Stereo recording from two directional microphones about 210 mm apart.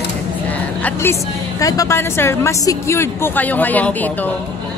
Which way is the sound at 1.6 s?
15° left (ahead or behind).